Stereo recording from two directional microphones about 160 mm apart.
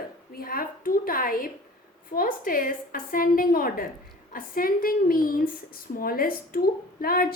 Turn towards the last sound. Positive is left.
turn(degrees=65)  # may be behind; listen again after turning